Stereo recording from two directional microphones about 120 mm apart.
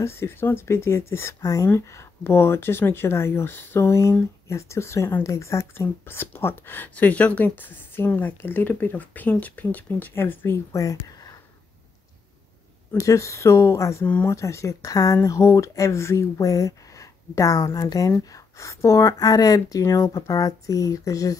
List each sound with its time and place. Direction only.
0.0 s speech: 20° left (ahead or behind)
12.9 s speech: 25° left (ahead or behind)